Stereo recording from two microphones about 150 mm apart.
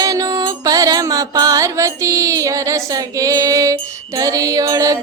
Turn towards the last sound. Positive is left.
turn(degrees=-20)  # may be behind; listen again after turning